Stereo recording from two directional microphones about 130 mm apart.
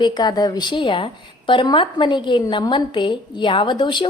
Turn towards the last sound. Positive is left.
turn(degrees=35)  # may be behind; listen again after turning